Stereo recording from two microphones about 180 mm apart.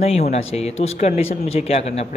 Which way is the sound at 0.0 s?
35° left (ahead or behind).